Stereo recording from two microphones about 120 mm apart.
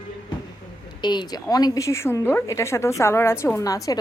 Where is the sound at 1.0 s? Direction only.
40° left (ahead or behind).